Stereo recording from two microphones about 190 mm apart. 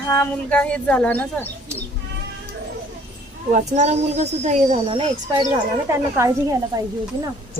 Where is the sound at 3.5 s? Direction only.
40° right (ahead or behind).